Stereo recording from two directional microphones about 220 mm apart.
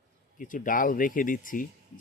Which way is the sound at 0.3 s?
35° left (ahead or behind).